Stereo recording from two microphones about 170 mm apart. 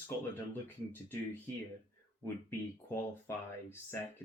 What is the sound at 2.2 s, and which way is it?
Speech, 15° left (ahead or behind).